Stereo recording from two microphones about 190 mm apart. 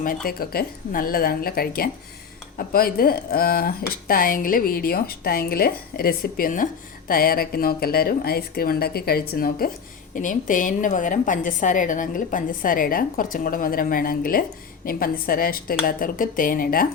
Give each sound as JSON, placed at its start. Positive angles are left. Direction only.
{"t": 0.3, "sound": "a woman's voice", "side_deg": 50}